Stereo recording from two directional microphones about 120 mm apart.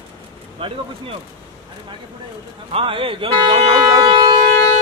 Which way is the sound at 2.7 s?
45° right (ahead or behind).